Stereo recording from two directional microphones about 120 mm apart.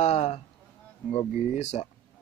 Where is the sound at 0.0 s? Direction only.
60° left (ahead or behind).